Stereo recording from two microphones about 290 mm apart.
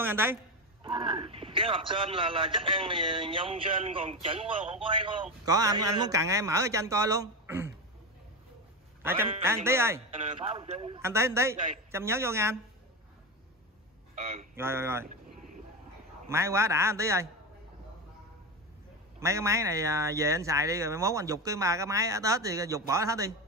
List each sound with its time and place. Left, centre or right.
0.0 s a man's voice: centre
9.0 s a man's voice: centre
11.0 s a man's voice: centre
14.2 s speech: right
14.5 s a man's voice: centre
16.3 s a man's voice: centre
19.1 s a man's voice: centre